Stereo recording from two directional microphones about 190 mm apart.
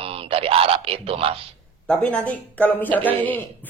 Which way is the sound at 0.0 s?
30° right (ahead or behind).